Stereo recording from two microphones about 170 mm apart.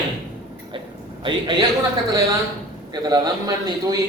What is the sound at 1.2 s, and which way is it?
Speech, 30° right (ahead or behind).